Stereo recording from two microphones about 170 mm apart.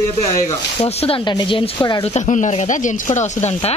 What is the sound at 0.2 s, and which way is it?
Speech, 35° left (ahead or behind).